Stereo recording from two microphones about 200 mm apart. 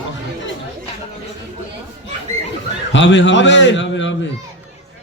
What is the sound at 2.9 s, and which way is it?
A man's voice, 65° left (ahead or behind).